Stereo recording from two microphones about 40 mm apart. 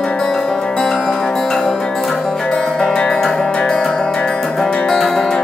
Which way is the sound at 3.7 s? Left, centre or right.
Centre.